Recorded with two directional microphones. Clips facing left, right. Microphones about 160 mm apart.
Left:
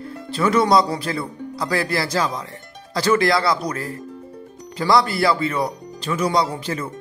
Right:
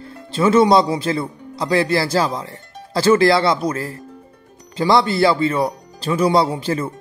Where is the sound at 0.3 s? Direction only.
25° right (ahead or behind).